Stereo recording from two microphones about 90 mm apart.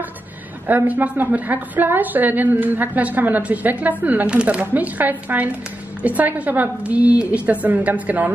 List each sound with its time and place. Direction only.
0.7 s a woman's voice: 20° right (ahead or behind)